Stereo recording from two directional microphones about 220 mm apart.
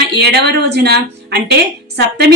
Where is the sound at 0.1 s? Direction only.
50° right (ahead or behind).